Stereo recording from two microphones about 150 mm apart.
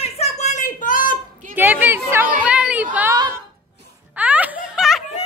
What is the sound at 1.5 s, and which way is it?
Chatter, 15° right (ahead or behind).